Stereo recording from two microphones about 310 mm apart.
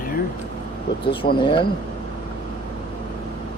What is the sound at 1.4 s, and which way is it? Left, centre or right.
Speech, centre.